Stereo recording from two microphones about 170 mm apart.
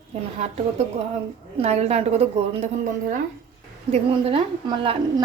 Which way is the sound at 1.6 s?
40° right (ahead or behind).